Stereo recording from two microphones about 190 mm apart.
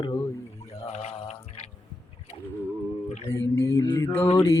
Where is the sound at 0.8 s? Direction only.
35° left (ahead or behind).